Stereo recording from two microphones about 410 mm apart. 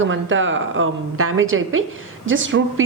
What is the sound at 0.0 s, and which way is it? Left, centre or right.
A woman's voice, right.